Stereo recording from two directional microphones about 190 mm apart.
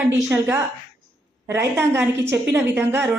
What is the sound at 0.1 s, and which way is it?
Speech, 15° right (ahead or behind).